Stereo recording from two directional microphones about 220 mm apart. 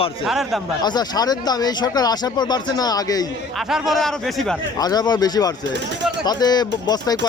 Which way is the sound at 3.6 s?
Centre (ahead or behind).